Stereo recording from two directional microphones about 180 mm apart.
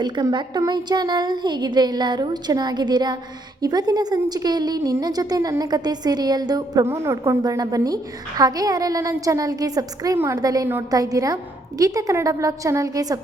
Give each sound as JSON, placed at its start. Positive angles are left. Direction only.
{"t": 0.0, "sound": "a woman's voice", "side_deg": -25}